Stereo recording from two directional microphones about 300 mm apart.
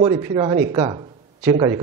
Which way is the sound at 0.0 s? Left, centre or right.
Centre.